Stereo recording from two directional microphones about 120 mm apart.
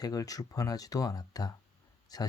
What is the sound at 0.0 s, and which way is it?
Speech, 30° left (ahead or behind).